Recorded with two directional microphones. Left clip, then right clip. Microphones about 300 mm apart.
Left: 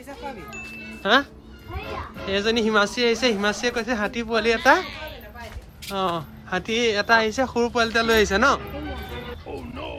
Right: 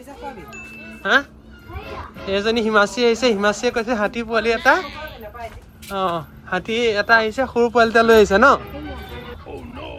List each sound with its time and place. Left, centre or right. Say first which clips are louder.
1.0 s speech: right 2 dB; centre
1.8 s speech: even; centre
4.7 s speech: right 1 dB; centre